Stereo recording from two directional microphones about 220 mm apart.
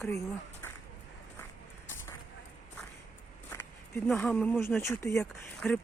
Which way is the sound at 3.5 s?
10° left (ahead or behind).